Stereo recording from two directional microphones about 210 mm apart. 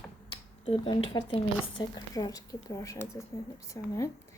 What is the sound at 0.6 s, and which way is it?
A woman's voice, 25° left (ahead or behind).